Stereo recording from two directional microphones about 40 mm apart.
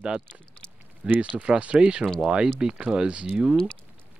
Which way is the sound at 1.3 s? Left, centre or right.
Right.